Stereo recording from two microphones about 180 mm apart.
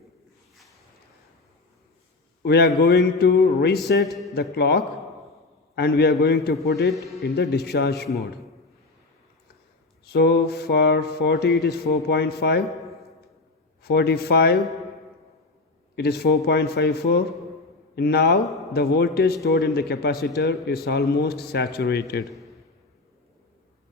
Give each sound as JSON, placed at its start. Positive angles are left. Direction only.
{"t": 2.4, "sound": "a man's voice", "side_deg": 65}
{"t": 4.0, "sound": "a man's voice", "side_deg": 0}
{"t": 4.4, "sound": "a man's voice", "side_deg": 65}
{"t": 10.1, "sound": "a man's voice", "side_deg": 60}
{"t": 13.8, "sound": "a man's voice", "side_deg": 65}
{"t": 16.0, "sound": "a man's voice", "side_deg": 60}